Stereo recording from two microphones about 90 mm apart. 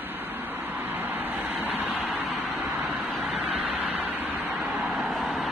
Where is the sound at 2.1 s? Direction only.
Centre (ahead or behind).